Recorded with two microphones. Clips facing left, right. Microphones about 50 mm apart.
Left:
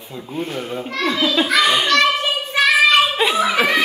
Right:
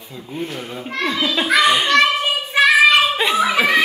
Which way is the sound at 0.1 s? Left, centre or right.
Left.